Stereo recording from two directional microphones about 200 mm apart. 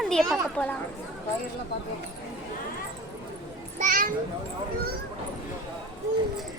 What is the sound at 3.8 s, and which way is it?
Children playing, 45° right (ahead or behind).